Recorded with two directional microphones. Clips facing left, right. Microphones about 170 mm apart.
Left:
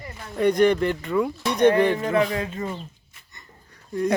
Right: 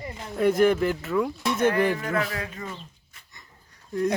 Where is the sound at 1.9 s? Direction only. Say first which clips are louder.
Left 6 dB; 25° left (ahead or behind).